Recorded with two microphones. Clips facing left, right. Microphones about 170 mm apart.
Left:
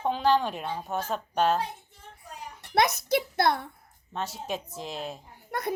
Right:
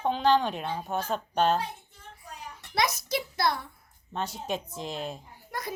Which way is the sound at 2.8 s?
60° left (ahead or behind).